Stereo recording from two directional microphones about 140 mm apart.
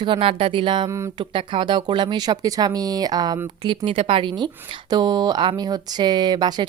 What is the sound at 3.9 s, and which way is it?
Speech, 40° right (ahead or behind).